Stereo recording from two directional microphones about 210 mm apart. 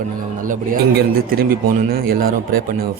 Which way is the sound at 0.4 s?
40° right (ahead or behind).